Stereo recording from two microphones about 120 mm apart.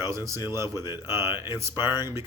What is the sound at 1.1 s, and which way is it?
Speech, 35° left (ahead or behind).